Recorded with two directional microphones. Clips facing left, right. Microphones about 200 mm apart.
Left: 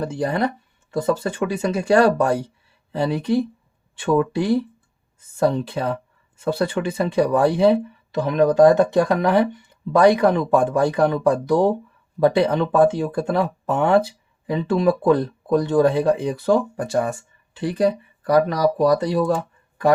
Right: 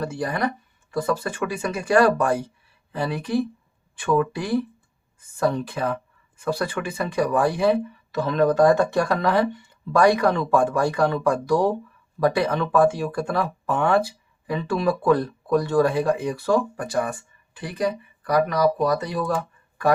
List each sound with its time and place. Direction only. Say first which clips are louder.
0.0 s speech: left 3 dB; 20° left (ahead or behind)